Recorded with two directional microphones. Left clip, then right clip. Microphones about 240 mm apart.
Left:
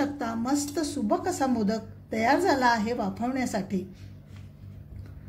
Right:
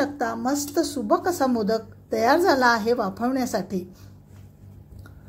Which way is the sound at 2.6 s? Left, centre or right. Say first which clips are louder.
Right 5 dB; centre.